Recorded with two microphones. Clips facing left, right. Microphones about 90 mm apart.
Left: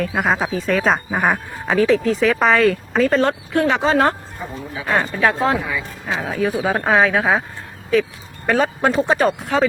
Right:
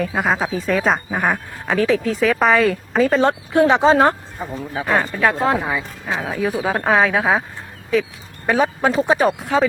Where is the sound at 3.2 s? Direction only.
20° right (ahead or behind).